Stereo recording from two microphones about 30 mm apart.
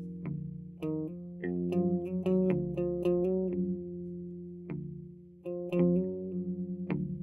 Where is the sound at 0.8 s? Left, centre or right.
Centre.